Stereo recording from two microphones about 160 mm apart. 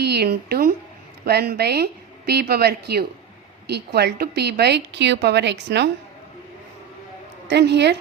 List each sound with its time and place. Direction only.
0.0 s a woman's voice: 90° right
7.5 s a woman's voice: 90° right